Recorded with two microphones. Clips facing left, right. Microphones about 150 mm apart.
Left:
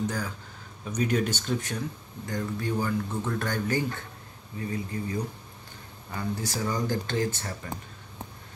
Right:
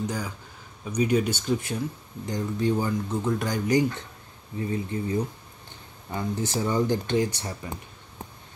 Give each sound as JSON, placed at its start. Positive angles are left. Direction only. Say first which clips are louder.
{"t": 0.0, "sound": "speech", "louder": "even", "side_deg": -10}
{"t": 2.2, "sound": "speech", "louder": "right 5 dB", "side_deg": -20}
{"t": 4.6, "sound": "speech", "louder": "right 4 dB", "side_deg": -25}